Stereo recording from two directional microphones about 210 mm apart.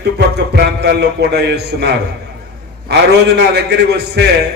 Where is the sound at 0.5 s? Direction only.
50° right (ahead or behind).